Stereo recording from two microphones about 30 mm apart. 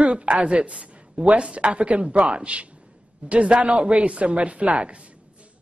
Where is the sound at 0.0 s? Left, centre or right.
Right.